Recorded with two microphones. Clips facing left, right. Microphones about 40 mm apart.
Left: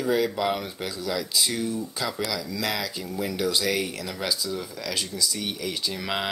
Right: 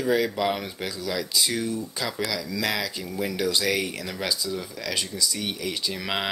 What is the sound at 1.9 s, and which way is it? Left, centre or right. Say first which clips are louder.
Speech: even; centre.